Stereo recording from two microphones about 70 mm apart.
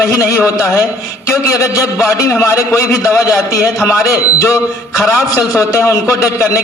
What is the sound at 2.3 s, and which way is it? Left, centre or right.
A man's voice, left.